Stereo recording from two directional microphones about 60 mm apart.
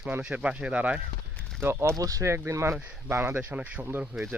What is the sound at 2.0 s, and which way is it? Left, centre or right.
Speech, right.